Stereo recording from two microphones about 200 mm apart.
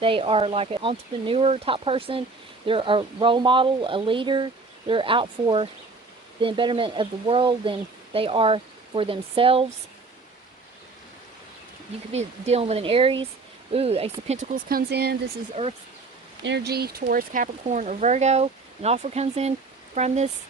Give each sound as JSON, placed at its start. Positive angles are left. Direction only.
{"t": 0.0, "sound": "speech", "side_deg": -25}
{"t": 12.1, "sound": "speech", "side_deg": -30}
{"t": 15.6, "sound": "speech", "side_deg": -35}
{"t": 16.4, "sound": "speech", "side_deg": -60}